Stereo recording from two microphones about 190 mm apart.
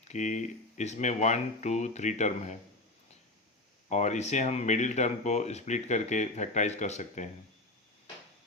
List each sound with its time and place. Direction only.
0.1 s speech: 40° left (ahead or behind)
3.8 s speech: 40° left (ahead or behind)